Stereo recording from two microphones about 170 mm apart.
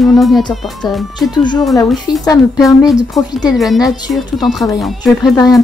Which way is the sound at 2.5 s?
Centre (ahead or behind).